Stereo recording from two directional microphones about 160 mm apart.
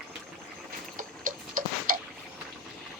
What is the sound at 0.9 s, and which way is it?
Tick-tock, 55° right (ahead or behind).